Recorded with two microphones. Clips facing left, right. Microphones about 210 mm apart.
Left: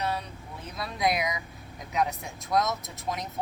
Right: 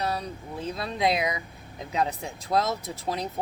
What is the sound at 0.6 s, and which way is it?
Speech, 25° right (ahead or behind).